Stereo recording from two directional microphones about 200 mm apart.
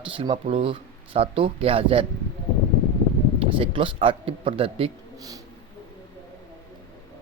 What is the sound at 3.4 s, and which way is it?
Speech, 25° right (ahead or behind).